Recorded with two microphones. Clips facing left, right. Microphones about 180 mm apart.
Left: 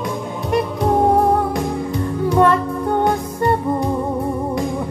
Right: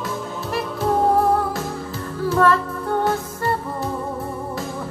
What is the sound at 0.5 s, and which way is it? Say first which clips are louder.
Music: left 4 dB; 20° left (ahead or behind).